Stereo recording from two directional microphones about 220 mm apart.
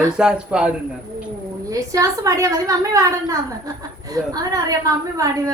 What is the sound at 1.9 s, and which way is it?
A woman's voice, 15° right (ahead or behind).